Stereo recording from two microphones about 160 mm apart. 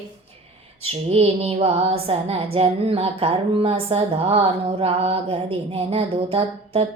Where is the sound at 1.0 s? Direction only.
40° right (ahead or behind).